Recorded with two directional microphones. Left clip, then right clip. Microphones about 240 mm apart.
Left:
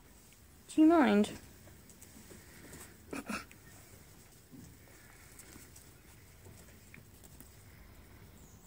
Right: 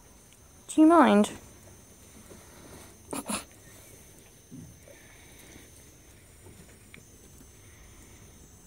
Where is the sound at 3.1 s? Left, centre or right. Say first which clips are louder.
Right 6 dB; centre.